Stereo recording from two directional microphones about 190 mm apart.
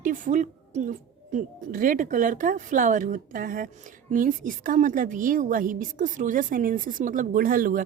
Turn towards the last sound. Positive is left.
turn(degrees=-45)  # may be behind; listen again after turning